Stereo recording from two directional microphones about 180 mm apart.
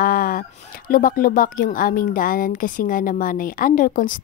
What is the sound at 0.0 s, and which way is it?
Speech, 55° left (ahead or behind).